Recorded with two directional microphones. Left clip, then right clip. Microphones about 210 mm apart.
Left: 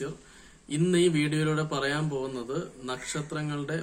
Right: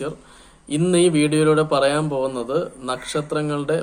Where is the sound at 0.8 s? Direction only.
45° left (ahead or behind).